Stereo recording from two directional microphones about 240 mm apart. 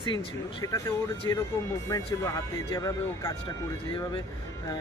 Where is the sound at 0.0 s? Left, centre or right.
Centre.